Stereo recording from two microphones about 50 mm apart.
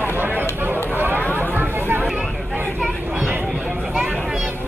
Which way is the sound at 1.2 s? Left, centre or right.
Left.